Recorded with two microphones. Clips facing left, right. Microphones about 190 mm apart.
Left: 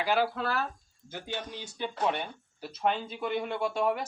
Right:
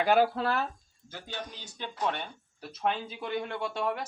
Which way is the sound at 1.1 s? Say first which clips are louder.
Left 3 dB; 15° left (ahead or behind).